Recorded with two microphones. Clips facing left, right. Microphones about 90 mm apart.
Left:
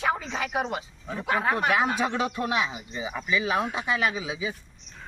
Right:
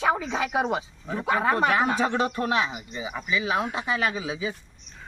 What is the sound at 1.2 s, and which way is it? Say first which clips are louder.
Speech: right 2 dB; 30° right (ahead or behind).